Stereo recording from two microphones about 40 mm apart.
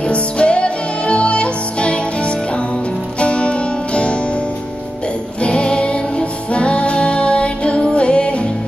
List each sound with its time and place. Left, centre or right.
0.0 s music: left
5.4 s music: left